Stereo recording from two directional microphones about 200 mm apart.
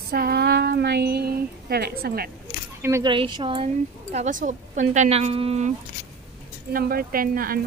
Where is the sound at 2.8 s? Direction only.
15° right (ahead or behind).